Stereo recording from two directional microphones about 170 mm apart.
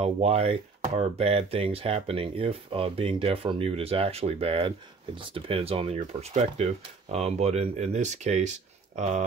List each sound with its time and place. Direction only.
0.0 s speech: 35° right (ahead or behind)